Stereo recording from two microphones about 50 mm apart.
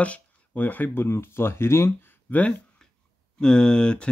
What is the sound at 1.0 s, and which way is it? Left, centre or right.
Speech, left.